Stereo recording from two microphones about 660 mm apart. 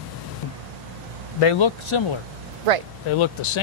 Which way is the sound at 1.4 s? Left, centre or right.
Left.